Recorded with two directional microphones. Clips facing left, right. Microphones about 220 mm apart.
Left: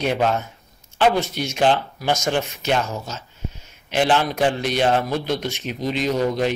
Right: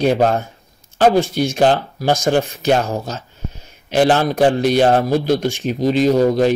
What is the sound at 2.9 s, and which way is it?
Speech, 55° right (ahead or behind).